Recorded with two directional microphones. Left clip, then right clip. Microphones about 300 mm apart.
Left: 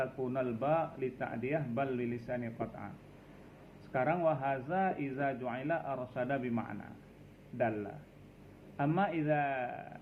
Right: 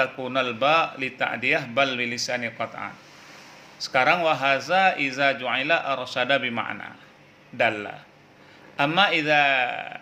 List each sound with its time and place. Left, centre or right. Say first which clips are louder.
0.0 s a man's voice: right 11 dB; right
3.9 s a man's voice: right 11 dB; right
8.7 s a man's voice: right 13 dB; right